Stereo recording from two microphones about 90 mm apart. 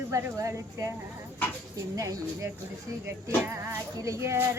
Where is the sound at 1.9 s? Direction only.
40° right (ahead or behind).